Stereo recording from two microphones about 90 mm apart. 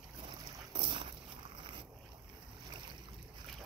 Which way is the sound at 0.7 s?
65° right (ahead or behind).